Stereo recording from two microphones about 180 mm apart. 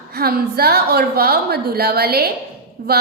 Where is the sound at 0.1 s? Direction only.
60° right (ahead or behind).